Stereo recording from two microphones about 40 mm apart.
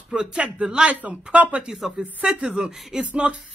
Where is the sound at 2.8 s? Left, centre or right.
Centre.